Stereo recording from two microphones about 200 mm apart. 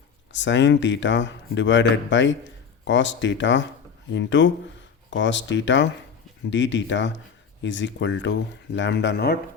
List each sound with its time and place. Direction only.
0.3 s speech: 65° left (ahead or behind)